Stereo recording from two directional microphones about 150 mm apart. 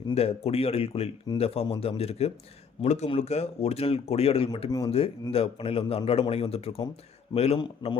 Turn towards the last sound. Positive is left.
turn(degrees=35)  # may be behind; listen again after turning